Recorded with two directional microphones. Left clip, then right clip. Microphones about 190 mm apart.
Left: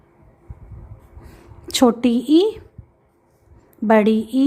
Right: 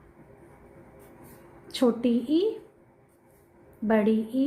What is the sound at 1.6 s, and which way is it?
Speech, 45° left (ahead or behind).